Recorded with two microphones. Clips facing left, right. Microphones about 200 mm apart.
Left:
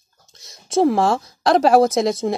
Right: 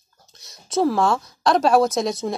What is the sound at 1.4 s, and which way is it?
Speech, 60° left (ahead or behind).